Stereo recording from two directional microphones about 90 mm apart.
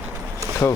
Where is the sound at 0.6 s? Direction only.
30° left (ahead or behind).